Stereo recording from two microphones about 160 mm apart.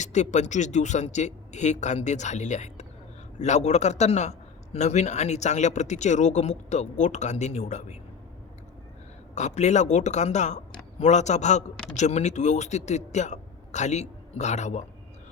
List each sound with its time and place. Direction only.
0.0 s a man's voice: 45° left (ahead or behind)
9.3 s a man's voice: 45° left (ahead or behind)